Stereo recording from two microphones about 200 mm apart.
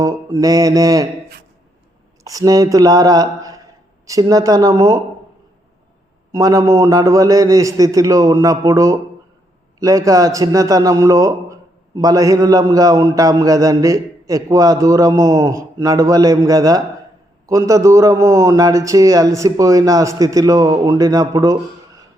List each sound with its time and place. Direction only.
0.0 s a man's voice: 15° right (ahead or behind)
2.2 s a man's voice: 20° right (ahead or behind)
6.3 s a man's voice: 15° right (ahead or behind)